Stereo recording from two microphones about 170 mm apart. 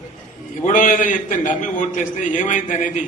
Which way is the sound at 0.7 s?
50° left (ahead or behind).